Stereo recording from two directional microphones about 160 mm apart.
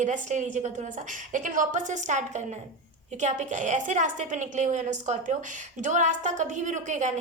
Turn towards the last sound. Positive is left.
turn(degrees=-50)  # may be behind; listen again after turning